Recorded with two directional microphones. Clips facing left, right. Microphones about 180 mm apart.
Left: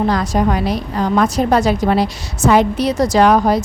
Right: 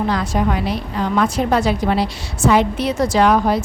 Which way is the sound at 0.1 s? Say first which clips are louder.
Left 3 dB; 40° left (ahead or behind).